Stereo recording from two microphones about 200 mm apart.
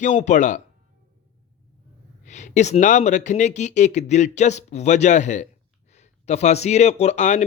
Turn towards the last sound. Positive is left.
turn(degrees=35)  # may be behind; listen again after turning